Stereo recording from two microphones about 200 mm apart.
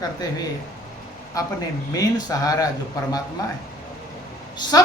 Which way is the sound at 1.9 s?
20° left (ahead or behind).